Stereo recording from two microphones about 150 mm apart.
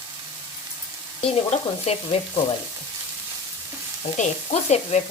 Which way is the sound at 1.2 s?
45° left (ahead or behind).